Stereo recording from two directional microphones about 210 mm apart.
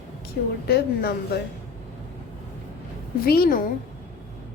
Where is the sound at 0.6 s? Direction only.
50° left (ahead or behind).